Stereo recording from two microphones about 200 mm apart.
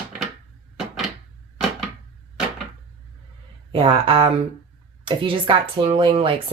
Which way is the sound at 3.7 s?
25° right (ahead or behind).